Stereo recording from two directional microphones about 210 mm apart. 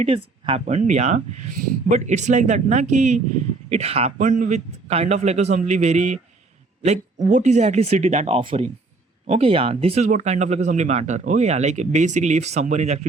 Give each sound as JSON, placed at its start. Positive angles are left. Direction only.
{"t": 0.0, "sound": "speech", "side_deg": -30}